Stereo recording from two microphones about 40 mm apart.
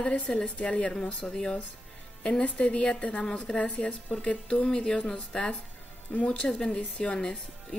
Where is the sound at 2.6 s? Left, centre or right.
Left.